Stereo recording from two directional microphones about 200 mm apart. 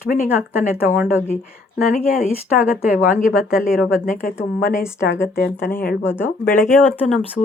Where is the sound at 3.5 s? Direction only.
Centre (ahead or behind).